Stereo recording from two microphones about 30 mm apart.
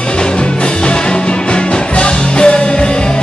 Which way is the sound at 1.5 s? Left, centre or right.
Left.